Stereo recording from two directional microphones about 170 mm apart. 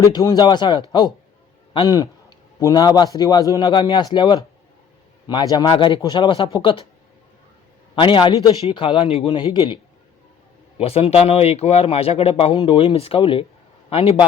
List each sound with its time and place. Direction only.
0.0 s a man's voice: 20° left (ahead or behind)
7.9 s a man's voice: 30° left (ahead or behind)
10.8 s speech: 35° left (ahead or behind)